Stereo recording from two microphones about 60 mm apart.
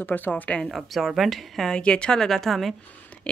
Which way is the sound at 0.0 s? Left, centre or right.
Left.